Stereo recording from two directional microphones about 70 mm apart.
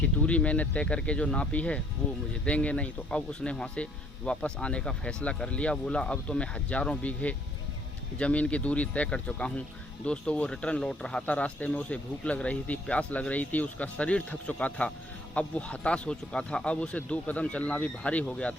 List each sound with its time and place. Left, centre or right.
0.3 s speech: centre